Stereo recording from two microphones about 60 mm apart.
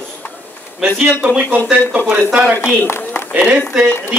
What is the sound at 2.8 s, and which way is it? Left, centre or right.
Speech, left.